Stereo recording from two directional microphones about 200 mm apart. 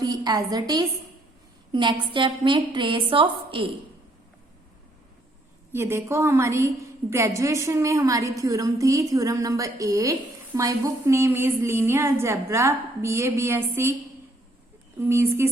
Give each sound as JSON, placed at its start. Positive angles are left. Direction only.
{"t": 0.0, "sound": "a woman's voice", "side_deg": -20}
{"t": 5.7, "sound": "a woman's voice", "side_deg": -15}
{"t": 15.0, "sound": "a woman's voice", "side_deg": -15}